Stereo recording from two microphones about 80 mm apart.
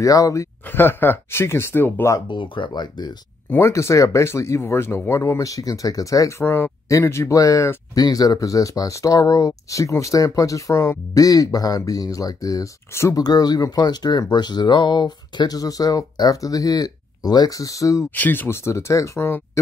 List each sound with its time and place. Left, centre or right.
0.0 s speech: left
0.7 s speech: left
2.2 s speech: left
3.6 s speech: left
9.5 s speech: left
18.1 s speech: left